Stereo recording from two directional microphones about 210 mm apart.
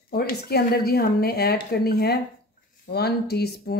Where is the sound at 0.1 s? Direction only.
50° left (ahead or behind).